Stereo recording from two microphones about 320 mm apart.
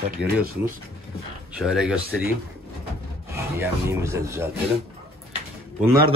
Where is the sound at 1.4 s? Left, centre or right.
Centre.